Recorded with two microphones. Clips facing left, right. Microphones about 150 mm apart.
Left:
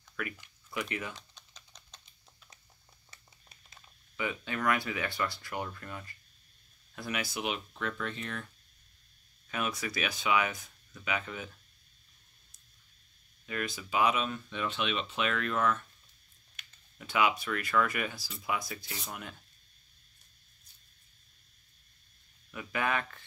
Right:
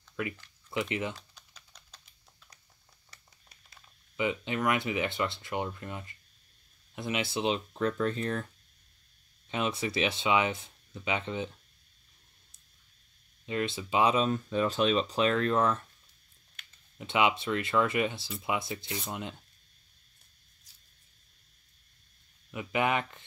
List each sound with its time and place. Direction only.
0.2 s speech: 25° right (ahead or behind)
3.1 s a sound: 25° left (ahead or behind)
4.2 s speech: 20° right (ahead or behind); by 8.5 s 40° right (ahead or behind)
9.5 s speech: 25° right (ahead or behind)
13.5 s speech: 25° right (ahead or behind)
17.0 s speech: 25° right (ahead or behind)
22.5 s speech: 20° right (ahead or behind)